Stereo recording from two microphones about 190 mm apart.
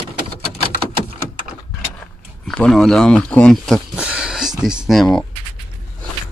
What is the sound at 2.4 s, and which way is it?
Speech, 5° left (ahead or behind).